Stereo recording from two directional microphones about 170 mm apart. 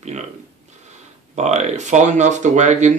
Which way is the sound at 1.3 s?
40° right (ahead or behind).